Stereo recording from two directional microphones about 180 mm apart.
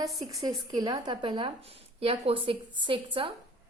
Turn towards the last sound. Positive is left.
turn(degrees=-30)  # may be behind; listen again after turning